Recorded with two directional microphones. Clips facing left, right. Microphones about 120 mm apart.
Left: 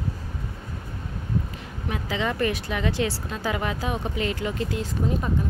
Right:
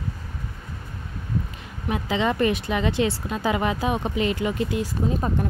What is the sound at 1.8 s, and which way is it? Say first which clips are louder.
Speech: right 4 dB; 20° right (ahead or behind).